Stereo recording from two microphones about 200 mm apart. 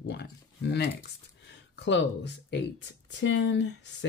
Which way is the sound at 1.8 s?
60° left (ahead or behind).